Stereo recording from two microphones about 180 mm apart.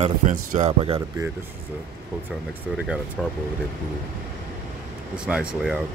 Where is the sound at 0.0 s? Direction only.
45° right (ahead or behind).